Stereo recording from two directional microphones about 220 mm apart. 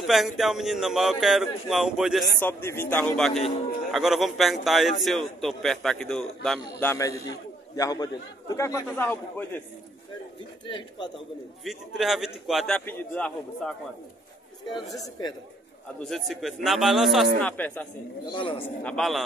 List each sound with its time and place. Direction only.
0.0 s a man's voice: centre (ahead or behind)
2.4 s a man's voice: 10° left (ahead or behind)
10.7 s speech: 20° left (ahead or behind)
11.6 s a man's voice: centre (ahead or behind)
14.9 s a man's voice: 15° left (ahead or behind)
16.0 s a man's voice: centre (ahead or behind)
18.3 s speech: 25° left (ahead or behind)
18.9 s a man's voice: centre (ahead or behind)